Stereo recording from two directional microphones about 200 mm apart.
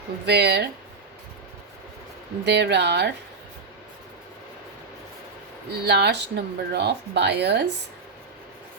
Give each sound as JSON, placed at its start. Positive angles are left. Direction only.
{"t": 0.3, "sound": "speech", "side_deg": -55}
{"t": 2.4, "sound": "speech", "side_deg": -55}
{"t": 5.8, "sound": "speech", "side_deg": -55}